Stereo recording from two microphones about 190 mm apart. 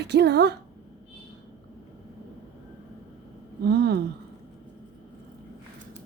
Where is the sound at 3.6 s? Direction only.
60° right (ahead or behind).